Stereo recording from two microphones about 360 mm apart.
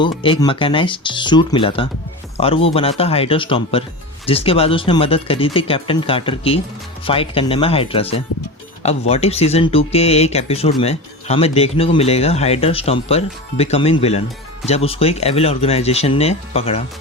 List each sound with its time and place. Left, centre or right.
0.0 s speech: centre